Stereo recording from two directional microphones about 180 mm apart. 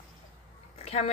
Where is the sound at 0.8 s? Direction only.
35° left (ahead or behind).